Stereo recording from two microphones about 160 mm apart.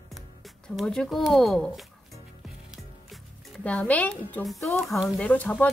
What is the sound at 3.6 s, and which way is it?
Speech, 10° left (ahead or behind).